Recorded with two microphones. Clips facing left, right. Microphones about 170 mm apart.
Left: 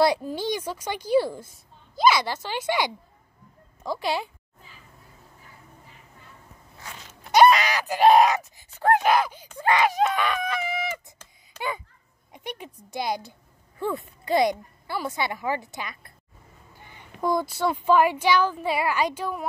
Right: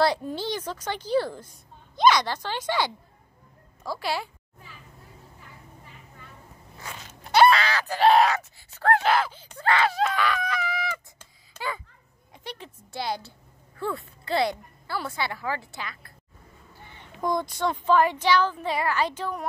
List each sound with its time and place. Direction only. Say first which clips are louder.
0.2 s groan: left 2 dB; 10° left (ahead or behind)
3.8 s speech: left 2 dB; 20° left (ahead or behind)
7.3 s groan: left 2 dB; 15° left (ahead or behind)
12.3 s groan: left 3 dB; 15° left (ahead or behind)
16.9 s groan: left 2 dB; 10° left (ahead or behind)